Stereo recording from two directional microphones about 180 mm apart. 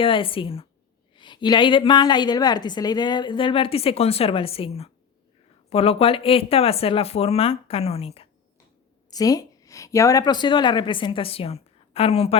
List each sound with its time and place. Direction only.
0.0 s a woman's voice: 30° left (ahead or behind)
9.0 s a woman's voice: 20° left (ahead or behind)